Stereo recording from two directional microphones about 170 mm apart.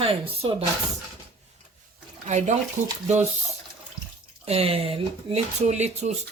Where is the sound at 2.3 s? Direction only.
45° right (ahead or behind).